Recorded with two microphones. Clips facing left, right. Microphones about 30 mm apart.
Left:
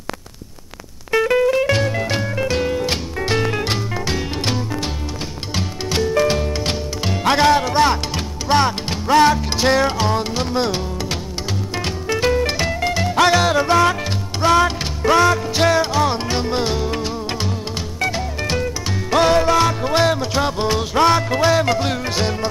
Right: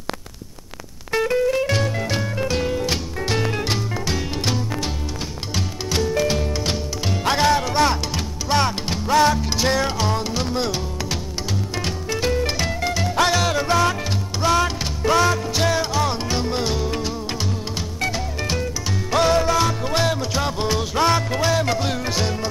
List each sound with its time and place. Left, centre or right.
1.4 s music: left
10.5 s speech: centre
11.8 s music: centre